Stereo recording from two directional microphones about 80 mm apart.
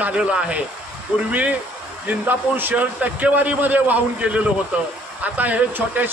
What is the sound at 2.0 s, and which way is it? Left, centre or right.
A man's voice, right.